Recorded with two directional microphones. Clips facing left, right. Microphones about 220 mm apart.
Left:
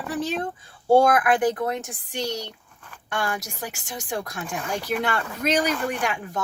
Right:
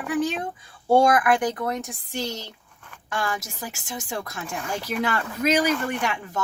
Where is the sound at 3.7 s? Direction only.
Centre (ahead or behind).